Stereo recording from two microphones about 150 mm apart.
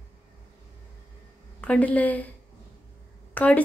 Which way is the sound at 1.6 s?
10° left (ahead or behind).